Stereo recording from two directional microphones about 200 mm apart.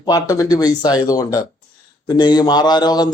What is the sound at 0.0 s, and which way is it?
Speech, 20° left (ahead or behind).